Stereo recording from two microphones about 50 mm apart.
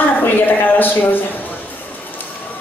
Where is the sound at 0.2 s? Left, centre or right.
Left.